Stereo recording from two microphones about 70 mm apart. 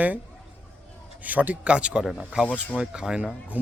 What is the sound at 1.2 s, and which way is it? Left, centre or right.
A man's voice, right.